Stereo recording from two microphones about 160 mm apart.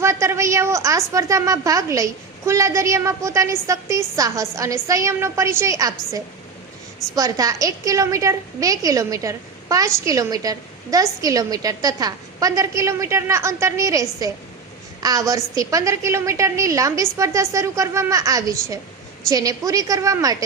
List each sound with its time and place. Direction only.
0.0 s a woman's voice: 15° right (ahead or behind)